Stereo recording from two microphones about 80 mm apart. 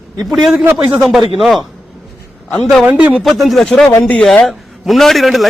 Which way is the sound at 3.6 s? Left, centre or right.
Centre.